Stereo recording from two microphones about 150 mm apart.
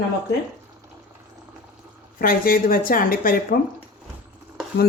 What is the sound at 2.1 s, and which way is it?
A woman's voice, 75° left (ahead or behind).